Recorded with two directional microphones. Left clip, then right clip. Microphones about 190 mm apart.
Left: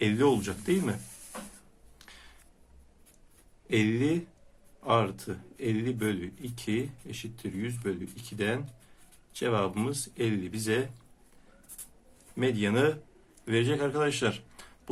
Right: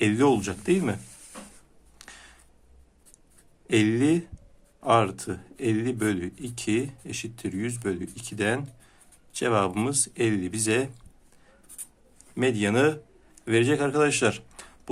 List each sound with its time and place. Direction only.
0.0 s speech: 35° right (ahead or behind)
2.0 s a sound: 40° right (ahead or behind)
3.7 s speech: 40° right (ahead or behind)
12.4 s speech: 40° right (ahead or behind)